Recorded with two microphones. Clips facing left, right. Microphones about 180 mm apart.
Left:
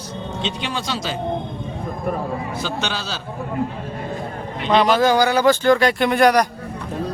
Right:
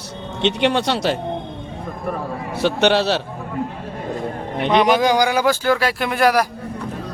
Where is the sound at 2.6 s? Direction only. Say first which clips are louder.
Right 10 dB; 70° right (ahead or behind).